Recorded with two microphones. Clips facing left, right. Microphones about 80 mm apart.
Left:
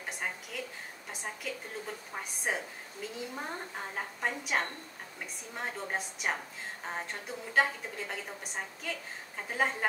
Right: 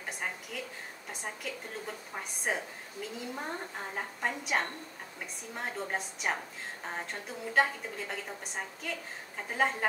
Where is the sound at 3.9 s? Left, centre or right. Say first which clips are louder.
Even; centre.